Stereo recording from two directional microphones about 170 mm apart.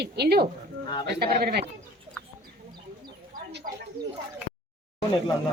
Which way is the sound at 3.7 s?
55° right (ahead or behind).